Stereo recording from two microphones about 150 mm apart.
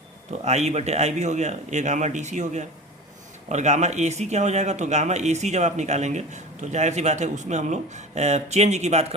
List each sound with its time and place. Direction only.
0.4 s speech: 50° right (ahead or behind)